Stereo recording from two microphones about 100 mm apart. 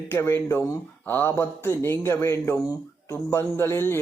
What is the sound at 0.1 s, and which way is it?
Speech, 25° left (ahead or behind).